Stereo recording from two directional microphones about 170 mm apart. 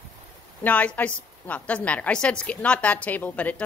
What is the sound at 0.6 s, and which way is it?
A woman's voice, 10° left (ahead or behind).